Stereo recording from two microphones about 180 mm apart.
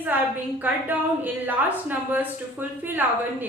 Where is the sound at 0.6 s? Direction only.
10° right (ahead or behind).